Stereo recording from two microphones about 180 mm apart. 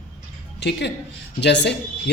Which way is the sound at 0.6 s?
75° left (ahead or behind).